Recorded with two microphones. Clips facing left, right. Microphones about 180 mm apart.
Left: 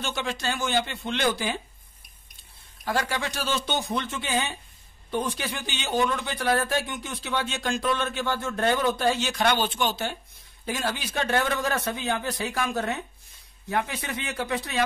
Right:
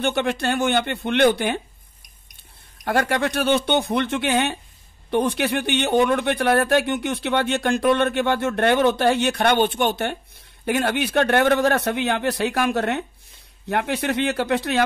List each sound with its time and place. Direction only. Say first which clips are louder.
0.0 s a man's voice: right 8 dB; 60° right (ahead or behind)
2.8 s a man's voice: right 7 dB; 60° right (ahead or behind)